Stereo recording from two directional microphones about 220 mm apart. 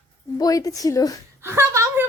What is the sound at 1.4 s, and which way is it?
Speech, 10° right (ahead or behind).